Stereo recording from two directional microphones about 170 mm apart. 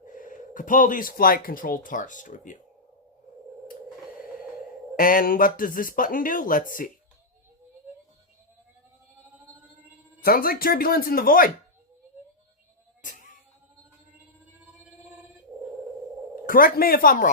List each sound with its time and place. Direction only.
0.1 s speech: 50° left (ahead or behind)
4.9 s speech: 55° left (ahead or behind)
10.2 s speech: 60° left (ahead or behind)
13.0 s music: 50° left (ahead or behind)
16.5 s speech: 60° left (ahead or behind)